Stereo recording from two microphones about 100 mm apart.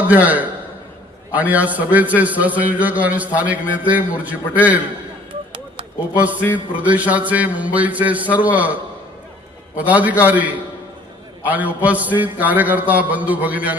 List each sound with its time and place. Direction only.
0.1 s a man's voice: 15° right (ahead or behind)
6.4 s a man's voice: 20° left (ahead or behind)
6.7 s a man's voice: 15° right (ahead or behind)
9.7 s a man's voice: 15° right (ahead or behind)